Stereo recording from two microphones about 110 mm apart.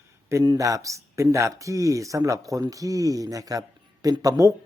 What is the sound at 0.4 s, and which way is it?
A man's voice, 30° right (ahead or behind).